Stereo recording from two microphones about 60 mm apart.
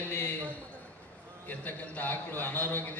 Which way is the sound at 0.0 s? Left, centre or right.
Left.